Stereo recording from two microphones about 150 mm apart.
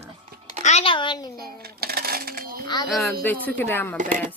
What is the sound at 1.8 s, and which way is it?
Speech, 90° right.